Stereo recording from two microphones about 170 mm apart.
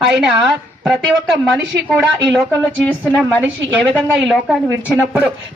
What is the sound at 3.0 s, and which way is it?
Speech, 10° right (ahead or behind).